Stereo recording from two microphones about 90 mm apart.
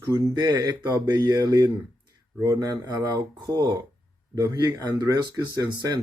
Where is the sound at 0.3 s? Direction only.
45° right (ahead or behind).